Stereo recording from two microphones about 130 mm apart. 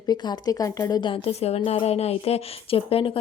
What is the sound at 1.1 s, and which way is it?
A woman's voice, 50° left (ahead or behind).